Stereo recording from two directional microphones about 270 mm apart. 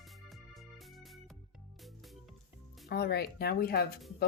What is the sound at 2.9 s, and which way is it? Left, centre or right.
Speech, left.